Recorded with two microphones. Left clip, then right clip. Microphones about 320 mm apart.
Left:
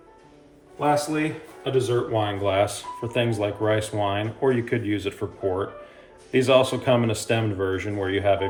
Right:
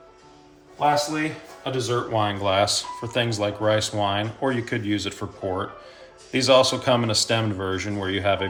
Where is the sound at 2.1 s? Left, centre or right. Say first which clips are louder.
Right 2 dB; centre.